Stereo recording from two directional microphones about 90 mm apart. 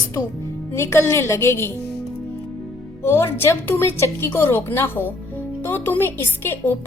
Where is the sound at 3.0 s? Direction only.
25° left (ahead or behind).